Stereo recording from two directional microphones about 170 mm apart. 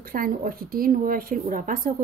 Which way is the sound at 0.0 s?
55° right (ahead or behind).